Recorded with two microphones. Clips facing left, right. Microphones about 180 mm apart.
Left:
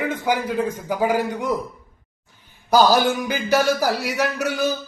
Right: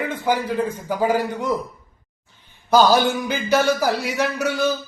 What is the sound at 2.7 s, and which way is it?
A man's voice, 10° left (ahead or behind).